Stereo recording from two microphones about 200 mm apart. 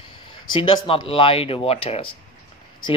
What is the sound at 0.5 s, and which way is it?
Speech, 25° left (ahead or behind).